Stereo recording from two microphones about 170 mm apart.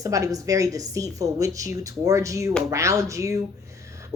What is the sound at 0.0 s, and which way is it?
A woman's voice, 20° right (ahead or behind).